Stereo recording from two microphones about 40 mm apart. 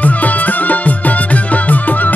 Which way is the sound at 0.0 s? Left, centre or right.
Left.